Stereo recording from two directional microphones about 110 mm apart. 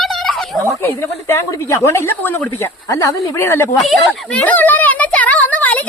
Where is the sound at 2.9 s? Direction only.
30° left (ahead or behind).